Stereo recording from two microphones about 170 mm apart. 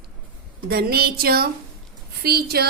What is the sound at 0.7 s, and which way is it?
A woman's voice, 65° right (ahead or behind).